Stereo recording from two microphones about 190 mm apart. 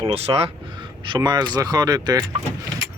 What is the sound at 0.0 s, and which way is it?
Speech, 30° right (ahead or behind).